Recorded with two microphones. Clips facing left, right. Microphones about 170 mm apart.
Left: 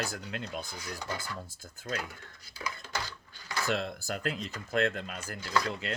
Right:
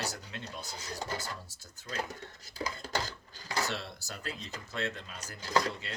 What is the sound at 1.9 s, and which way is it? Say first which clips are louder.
Dishes: even; 40° right (ahead or behind).